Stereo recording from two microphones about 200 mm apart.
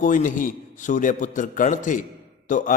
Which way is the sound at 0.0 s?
40° left (ahead or behind).